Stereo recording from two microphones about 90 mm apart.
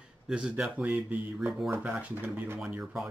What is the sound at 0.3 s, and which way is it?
Speech, 10° right (ahead or behind).